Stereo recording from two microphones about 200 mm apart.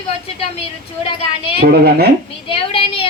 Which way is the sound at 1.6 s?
50° right (ahead or behind).